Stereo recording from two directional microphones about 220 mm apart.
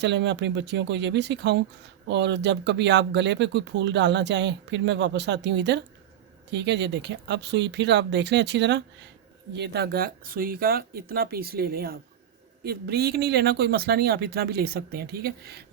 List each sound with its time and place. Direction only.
0.0 s speech: 50° right (ahead or behind)